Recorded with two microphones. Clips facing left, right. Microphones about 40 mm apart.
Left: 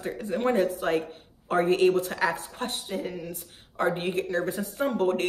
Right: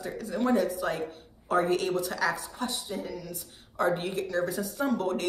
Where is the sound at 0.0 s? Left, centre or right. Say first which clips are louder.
Left 2 dB; left.